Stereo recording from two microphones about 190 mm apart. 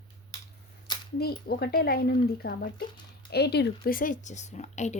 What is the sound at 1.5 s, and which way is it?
Speech, 55° left (ahead or behind).